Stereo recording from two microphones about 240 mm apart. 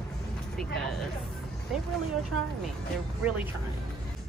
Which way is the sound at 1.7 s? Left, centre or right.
Centre.